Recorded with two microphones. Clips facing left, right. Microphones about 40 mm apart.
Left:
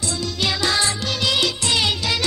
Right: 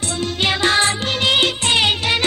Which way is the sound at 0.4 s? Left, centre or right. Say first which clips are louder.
Right 5 dB; right.